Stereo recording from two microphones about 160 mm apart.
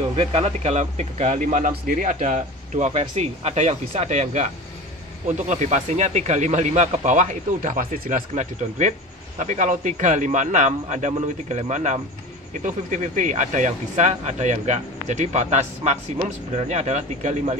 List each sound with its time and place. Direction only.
0.1 s speech: 40° right (ahead or behind)